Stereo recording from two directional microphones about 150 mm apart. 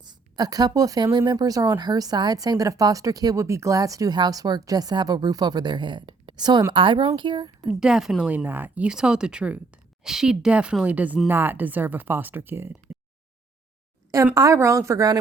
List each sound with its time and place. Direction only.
0.0 s a woman's voice: 25° right (ahead or behind)
7.8 s a woman's voice: 5° right (ahead or behind)
14.3 s speech: 20° right (ahead or behind)